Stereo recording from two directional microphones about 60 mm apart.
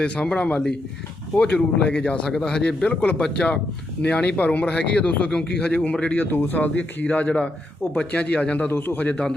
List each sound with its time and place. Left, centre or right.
0.0 s a man's voice: centre
6.1 s speech: left